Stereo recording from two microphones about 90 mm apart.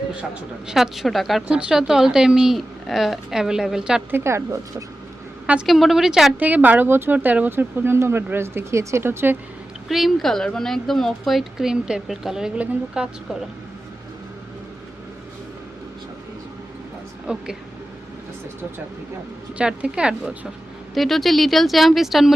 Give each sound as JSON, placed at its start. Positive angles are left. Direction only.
{"t": 0.7, "sound": "a woman's voice", "side_deg": -5}
{"t": 4.1, "sound": "a woman's voice", "side_deg": -30}
{"t": 5.6, "sound": "a woman's voice", "side_deg": 0}
{"t": 6.4, "sound": "speech", "side_deg": -20}
{"t": 9.9, "sound": "a woman's voice", "side_deg": 0}
{"t": 17.2, "sound": "speech", "side_deg": -10}
{"t": 19.5, "sound": "speech", "side_deg": -10}
{"t": 20.9, "sound": "a woman's voice", "side_deg": 0}